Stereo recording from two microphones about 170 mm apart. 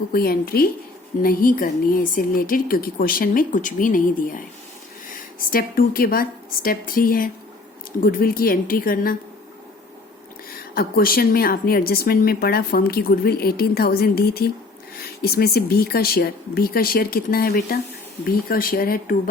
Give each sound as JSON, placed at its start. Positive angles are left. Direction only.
{"t": 0.1, "sound": "a woman's voice", "side_deg": 60}
{"t": 10.5, "sound": "a woman's voice", "side_deg": 60}